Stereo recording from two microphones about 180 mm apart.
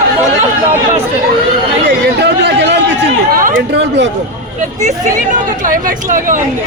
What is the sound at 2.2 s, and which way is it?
Chatter, 75° right (ahead or behind).